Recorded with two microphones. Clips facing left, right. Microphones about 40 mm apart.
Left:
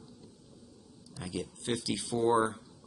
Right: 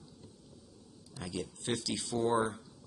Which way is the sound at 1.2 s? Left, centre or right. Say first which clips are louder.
Left 1 dB; centre.